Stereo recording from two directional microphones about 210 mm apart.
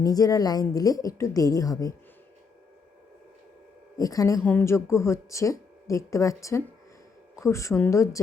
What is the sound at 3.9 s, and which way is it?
Speech, 15° left (ahead or behind).